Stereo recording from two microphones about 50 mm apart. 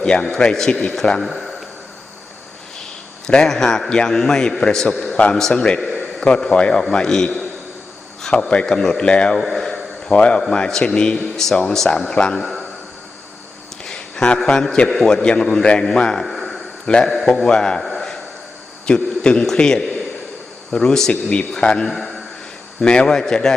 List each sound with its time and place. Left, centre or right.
0.0 s a man's voice: centre
1.3 s a sound: centre
3.2 s a man's voice: centre
9.3 s a sound: centre
10.2 s a man's voice: left; by 12.6 s centre
13.8 s a sound: centre
14.4 s a man's voice: centre
16.3 s a sound: centre
16.8 s a man's voice: centre
17.1 s a man's voice: centre
18.9 s a man's voice: centre
21.1 s a man's voice: left; by 22.2 s centre
22.8 s a man's voice: centre